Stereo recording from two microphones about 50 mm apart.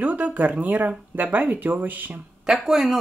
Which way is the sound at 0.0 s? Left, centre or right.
Right.